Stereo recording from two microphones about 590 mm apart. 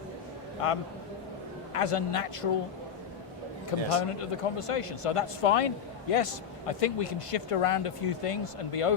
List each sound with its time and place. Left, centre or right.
0.6 s a man's voice: left
3.7 s a man's voice: left